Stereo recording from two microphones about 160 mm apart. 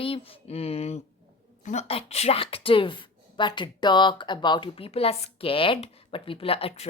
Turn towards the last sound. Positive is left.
turn(degrees=40)  # may be behind; listen again after turning